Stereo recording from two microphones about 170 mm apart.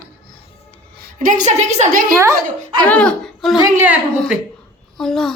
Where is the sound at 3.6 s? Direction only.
15° right (ahead or behind).